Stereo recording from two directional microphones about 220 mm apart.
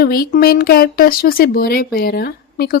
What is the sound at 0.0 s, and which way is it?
Speech, 40° left (ahead or behind).